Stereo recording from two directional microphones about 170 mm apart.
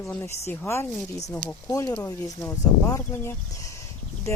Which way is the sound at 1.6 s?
20° left (ahead or behind).